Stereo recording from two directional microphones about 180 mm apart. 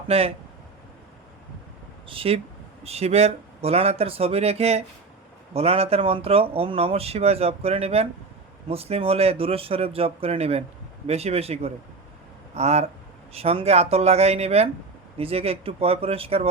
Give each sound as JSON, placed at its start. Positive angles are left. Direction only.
{"t": 0.1, "sound": "speech", "side_deg": -35}
{"t": 2.0, "sound": "speech", "side_deg": -30}